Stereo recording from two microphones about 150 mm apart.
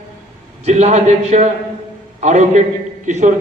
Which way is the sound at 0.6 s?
50° right (ahead or behind).